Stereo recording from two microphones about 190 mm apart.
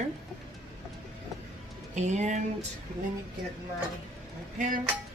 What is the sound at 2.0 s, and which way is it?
Speech, 40° right (ahead or behind).